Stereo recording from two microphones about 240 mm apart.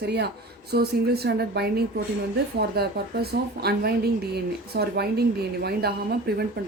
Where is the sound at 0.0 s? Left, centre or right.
Right.